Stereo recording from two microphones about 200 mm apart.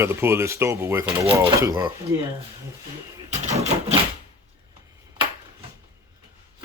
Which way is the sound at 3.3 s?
35° right (ahead or behind).